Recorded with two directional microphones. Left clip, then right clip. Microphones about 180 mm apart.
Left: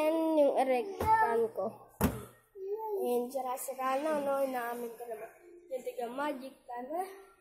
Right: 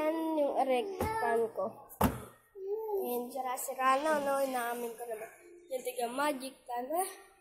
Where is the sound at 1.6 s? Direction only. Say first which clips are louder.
Even; 15° left (ahead or behind).